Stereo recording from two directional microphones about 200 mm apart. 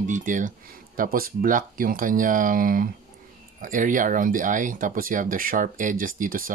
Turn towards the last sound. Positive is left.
turn(degrees=-45)  # may be behind; listen again after turning